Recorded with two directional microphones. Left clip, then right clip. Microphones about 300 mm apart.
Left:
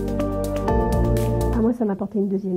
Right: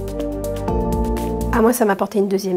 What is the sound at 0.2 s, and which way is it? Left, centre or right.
Music, centre.